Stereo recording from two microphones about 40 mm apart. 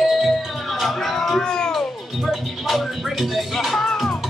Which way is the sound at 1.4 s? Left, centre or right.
Centre.